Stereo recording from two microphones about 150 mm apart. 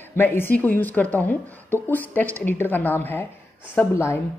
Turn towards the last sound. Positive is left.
turn(degrees=15)  # may be behind; listen again after turning